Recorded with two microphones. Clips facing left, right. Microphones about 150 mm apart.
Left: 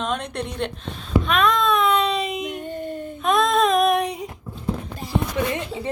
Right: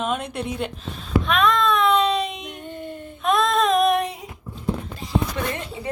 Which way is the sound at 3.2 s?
Centre (ahead or behind).